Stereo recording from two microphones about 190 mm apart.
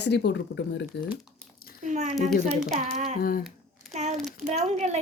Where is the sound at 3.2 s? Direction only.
50° left (ahead or behind).